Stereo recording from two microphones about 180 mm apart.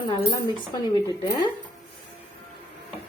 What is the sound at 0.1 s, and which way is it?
Speech, 25° left (ahead or behind).